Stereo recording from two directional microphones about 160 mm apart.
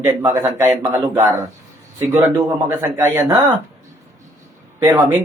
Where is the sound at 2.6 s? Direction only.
15° right (ahead or behind).